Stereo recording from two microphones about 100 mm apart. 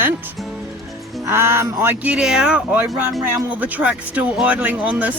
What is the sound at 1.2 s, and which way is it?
Music, 25° right (ahead or behind).